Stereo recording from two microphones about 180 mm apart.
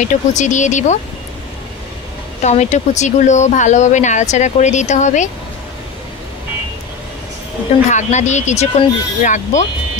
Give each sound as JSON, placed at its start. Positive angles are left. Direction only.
{"t": 0.0, "sound": "speech", "side_deg": 40}
{"t": 2.4, "sound": "speech", "side_deg": 40}
{"t": 7.9, "sound": "speech", "side_deg": 40}